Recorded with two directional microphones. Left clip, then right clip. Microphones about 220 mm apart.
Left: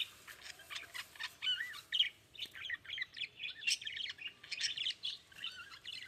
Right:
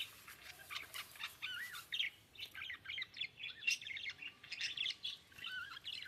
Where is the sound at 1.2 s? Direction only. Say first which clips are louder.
Left 8 dB; 15° left (ahead or behind).